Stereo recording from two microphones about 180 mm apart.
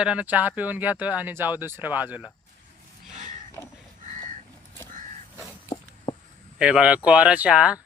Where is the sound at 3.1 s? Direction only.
40° right (ahead or behind).